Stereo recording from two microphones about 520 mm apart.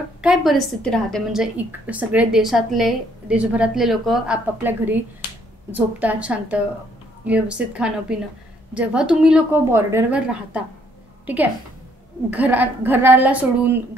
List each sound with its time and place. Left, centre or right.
0.2 s a woman's voice: centre
12.3 s a woman's voice: centre